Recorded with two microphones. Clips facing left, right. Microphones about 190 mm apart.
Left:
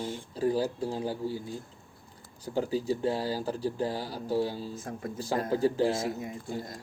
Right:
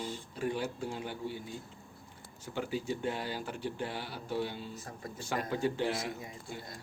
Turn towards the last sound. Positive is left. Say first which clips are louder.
# left 8 dB
turn(degrees=40)  # may be behind; listen again after turning